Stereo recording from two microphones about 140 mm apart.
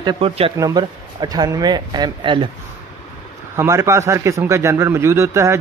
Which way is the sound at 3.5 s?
20° right (ahead or behind).